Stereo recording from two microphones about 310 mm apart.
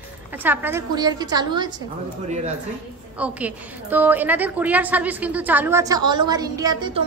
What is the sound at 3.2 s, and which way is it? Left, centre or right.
A woman's voice, centre.